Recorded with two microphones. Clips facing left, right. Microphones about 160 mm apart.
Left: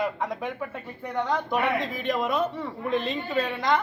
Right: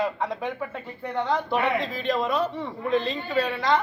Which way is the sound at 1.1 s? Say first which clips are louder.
Right 1 dB; 10° left (ahead or behind).